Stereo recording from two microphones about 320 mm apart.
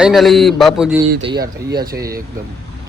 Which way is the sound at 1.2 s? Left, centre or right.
Centre.